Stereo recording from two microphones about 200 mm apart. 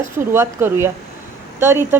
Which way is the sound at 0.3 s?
10° right (ahead or behind).